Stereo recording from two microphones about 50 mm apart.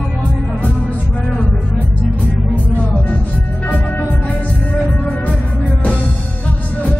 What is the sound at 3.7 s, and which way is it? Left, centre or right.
Music, left.